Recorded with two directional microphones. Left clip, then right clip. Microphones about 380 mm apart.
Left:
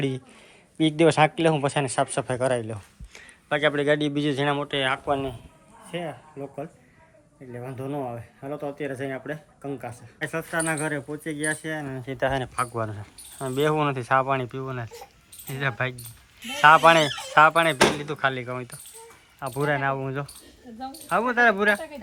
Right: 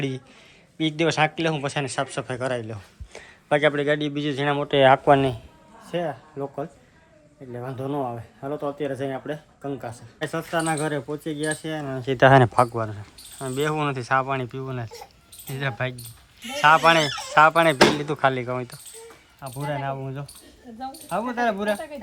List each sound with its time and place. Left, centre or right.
0.8 s speech: centre; by 5.3 s right
6.4 s speech: right
7.5 s speech: centre
12.1 s speech: right
12.7 s speech: centre